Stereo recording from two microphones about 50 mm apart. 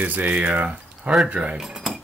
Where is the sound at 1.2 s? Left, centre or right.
Right.